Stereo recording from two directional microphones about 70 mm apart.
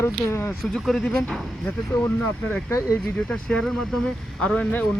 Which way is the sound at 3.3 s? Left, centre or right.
Centre.